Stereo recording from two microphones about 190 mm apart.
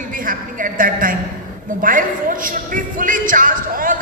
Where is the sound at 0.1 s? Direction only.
45° right (ahead or behind).